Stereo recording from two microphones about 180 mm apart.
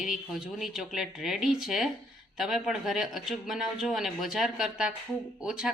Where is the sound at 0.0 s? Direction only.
Centre (ahead or behind).